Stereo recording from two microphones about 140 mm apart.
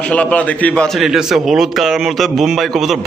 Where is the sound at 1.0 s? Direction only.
5° right (ahead or behind).